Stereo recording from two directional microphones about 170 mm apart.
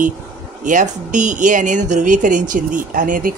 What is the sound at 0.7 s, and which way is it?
A woman's voice, 50° right (ahead or behind).